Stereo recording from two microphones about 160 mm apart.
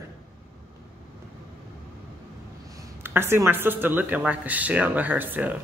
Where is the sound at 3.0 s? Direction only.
15° right (ahead or behind).